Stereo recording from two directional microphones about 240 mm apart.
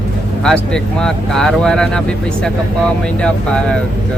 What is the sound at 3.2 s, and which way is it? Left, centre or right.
Speech, centre.